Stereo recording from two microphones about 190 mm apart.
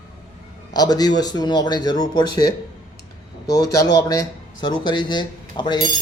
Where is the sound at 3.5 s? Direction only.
20° left (ahead or behind).